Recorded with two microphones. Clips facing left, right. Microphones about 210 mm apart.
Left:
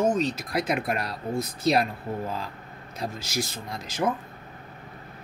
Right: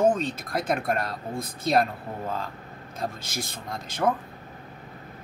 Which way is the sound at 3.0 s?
50° right (ahead or behind).